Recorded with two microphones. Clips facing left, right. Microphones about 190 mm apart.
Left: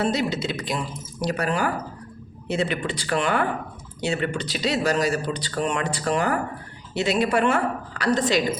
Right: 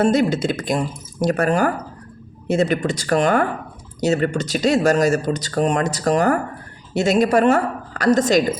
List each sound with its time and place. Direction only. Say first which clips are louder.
0.0 s speech: right 7 dB; 50° right (ahead or behind)